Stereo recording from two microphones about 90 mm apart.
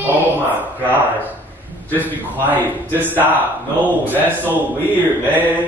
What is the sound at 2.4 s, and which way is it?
Speech, 20° right (ahead or behind).